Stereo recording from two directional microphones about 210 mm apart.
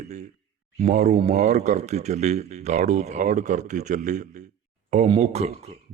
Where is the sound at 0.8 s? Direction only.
35° right (ahead or behind).